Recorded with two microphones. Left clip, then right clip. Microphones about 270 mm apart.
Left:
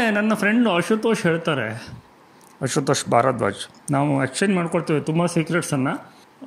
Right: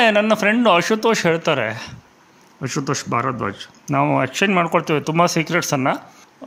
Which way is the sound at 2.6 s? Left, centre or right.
Centre.